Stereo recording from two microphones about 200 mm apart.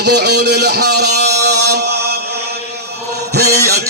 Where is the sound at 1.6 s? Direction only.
55° right (ahead or behind).